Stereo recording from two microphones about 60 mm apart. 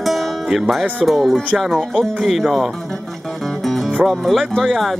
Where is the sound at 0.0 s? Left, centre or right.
Centre.